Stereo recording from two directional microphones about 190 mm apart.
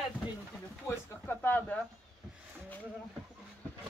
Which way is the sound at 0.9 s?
10° left (ahead or behind).